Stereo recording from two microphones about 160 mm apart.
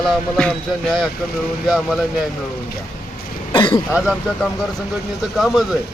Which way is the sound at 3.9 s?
10° right (ahead or behind).